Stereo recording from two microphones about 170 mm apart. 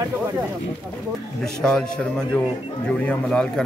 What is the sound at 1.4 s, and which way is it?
A man's voice, 5° left (ahead or behind).